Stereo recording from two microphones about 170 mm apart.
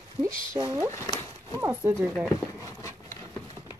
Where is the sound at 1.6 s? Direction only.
15° right (ahead or behind).